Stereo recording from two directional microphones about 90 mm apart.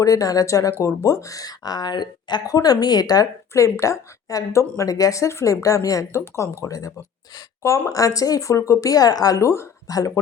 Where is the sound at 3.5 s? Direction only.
35° left (ahead or behind).